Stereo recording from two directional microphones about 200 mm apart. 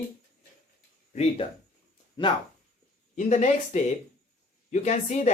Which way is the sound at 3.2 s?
40° left (ahead or behind).